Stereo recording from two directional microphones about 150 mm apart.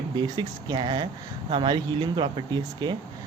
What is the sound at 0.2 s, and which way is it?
Speech, 30° right (ahead or behind).